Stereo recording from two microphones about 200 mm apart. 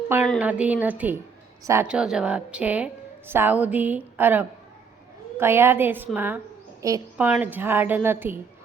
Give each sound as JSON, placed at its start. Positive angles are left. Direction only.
{"t": 0.3, "sound": "a woman's voice", "side_deg": -5}